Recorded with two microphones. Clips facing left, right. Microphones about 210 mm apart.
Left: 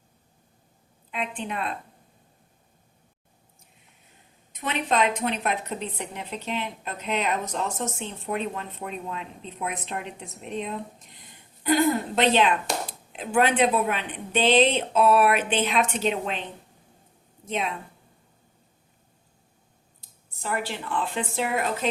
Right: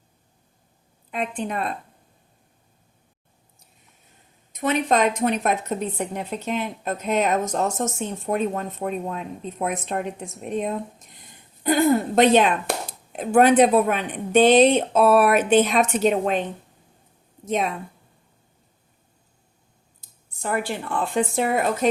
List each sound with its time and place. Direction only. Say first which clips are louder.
1.1 s a woman's voice: right 4 dB; 45° right (ahead or behind)
4.6 s a woman's voice: right 5 dB; 45° right (ahead or behind)
20.4 s a woman's voice: right 4 dB; 50° right (ahead or behind)